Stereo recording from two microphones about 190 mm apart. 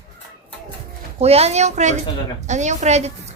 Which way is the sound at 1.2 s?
35° right (ahead or behind).